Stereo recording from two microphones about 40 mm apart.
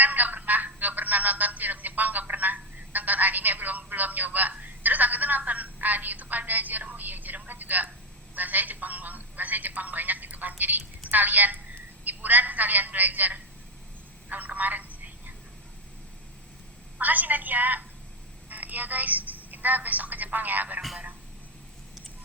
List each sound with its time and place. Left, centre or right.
0.0 s speech: right
14.3 s telephone: right
17.0 s a woman's voice: right